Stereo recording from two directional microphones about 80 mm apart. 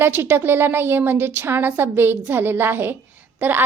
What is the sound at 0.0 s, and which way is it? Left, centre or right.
A woman's voice, right.